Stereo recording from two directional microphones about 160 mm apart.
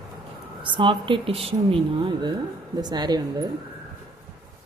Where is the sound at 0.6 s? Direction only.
30° right (ahead or behind).